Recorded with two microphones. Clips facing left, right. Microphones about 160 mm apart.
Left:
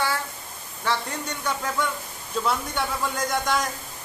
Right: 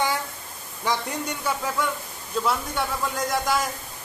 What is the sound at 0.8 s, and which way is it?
A man's voice, 10° right (ahead or behind).